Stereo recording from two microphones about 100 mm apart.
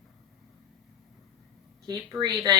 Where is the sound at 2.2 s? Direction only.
5° right (ahead or behind).